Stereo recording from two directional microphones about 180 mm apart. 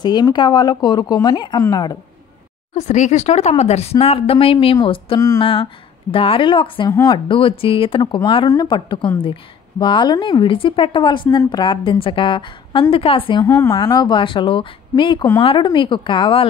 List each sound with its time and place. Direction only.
0.0 s a woman's voice: 25° left (ahead or behind)
2.7 s a woman's voice: 40° left (ahead or behind)